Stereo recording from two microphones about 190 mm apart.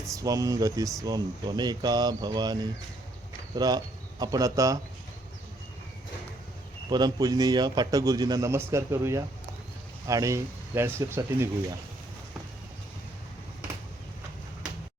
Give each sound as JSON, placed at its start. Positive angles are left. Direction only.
{"t": 0.1, "sound": "a man's voice", "side_deg": -15}
{"t": 6.9, "sound": "a man's voice", "side_deg": -20}